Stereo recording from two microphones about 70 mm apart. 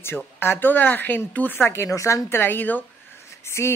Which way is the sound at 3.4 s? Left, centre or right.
Left.